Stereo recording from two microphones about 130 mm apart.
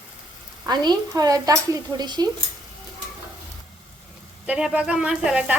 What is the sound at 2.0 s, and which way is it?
Speech, 30° right (ahead or behind).